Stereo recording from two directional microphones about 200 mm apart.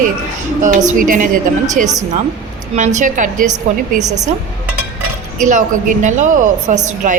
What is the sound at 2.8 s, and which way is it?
Speech, 40° right (ahead or behind).